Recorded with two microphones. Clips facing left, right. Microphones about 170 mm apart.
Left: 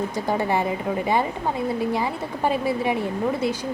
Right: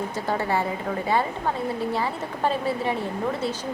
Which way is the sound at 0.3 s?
15° left (ahead or behind).